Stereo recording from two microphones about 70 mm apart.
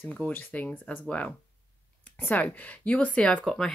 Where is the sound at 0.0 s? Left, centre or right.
Left.